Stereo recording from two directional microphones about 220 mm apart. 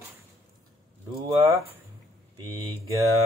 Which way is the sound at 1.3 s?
15° right (ahead or behind).